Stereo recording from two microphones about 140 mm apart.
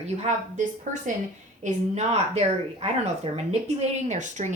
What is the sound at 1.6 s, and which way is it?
Speech, 50° right (ahead or behind).